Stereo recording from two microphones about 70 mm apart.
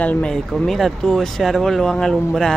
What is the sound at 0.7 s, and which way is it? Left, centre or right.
Speech, centre.